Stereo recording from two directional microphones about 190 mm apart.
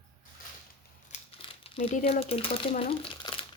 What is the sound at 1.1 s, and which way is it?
Crumpling, 30° left (ahead or behind).